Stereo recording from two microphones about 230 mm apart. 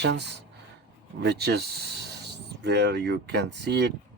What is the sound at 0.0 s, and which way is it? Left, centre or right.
Speech, right.